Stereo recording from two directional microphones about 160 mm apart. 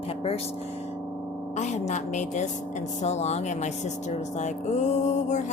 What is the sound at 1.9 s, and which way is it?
A woman's voice, 50° left (ahead or behind).